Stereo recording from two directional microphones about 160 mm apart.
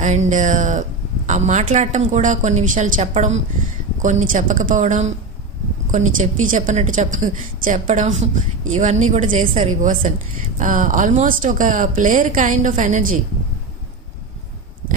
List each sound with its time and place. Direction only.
0.0 s a woman's voice: 50° right (ahead or behind)